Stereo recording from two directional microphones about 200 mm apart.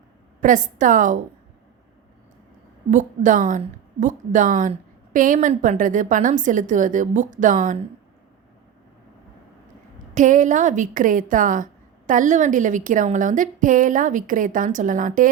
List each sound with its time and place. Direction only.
0.4 s a woman's voice: 40° right (ahead or behind)
2.9 s a woman's voice: 40° right (ahead or behind)
10.2 s a woman's voice: 40° right (ahead or behind)